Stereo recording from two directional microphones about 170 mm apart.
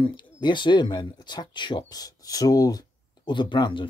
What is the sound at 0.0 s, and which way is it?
Speech, 25° left (ahead or behind).